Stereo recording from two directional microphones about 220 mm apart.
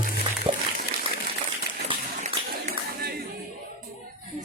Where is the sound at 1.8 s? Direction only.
30° right (ahead or behind).